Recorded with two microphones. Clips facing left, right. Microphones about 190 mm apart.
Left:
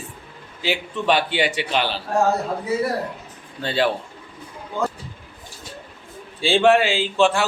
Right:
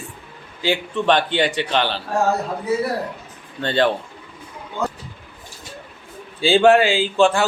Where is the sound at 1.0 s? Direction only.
10° left (ahead or behind).